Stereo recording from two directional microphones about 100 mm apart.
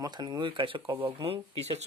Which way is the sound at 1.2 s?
80° right.